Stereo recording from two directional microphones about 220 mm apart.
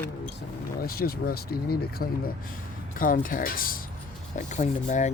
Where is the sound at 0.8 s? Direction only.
45° left (ahead or behind).